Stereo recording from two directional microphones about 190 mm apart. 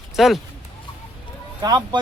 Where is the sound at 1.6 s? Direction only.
20° right (ahead or behind).